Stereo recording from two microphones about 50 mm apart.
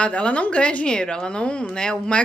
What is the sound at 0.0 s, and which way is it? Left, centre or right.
A woman's voice, left.